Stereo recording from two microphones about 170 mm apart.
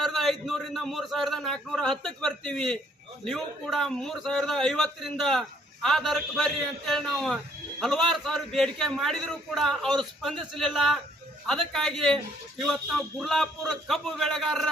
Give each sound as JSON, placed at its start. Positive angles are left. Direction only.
{"t": 0.0, "sound": "a man's voice", "side_deg": 0}